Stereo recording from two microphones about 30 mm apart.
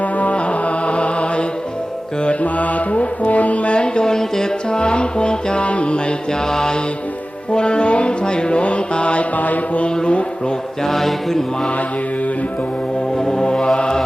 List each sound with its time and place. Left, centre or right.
0.0 s music: left
0.3 s music: left
2.4 s music: left
3.8 s music: left
4.8 s music: left
6.5 s music: left
7.5 s music: left
9.3 s mantra: left
9.8 s music: left
10.8 s mantra: centre
13.1 s music: left
13.7 s mantra: left